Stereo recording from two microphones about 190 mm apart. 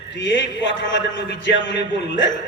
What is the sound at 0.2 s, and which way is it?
A man's voice, 75° left (ahead or behind).